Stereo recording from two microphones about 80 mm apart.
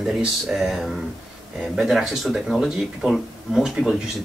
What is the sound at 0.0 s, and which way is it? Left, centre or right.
Speech, centre.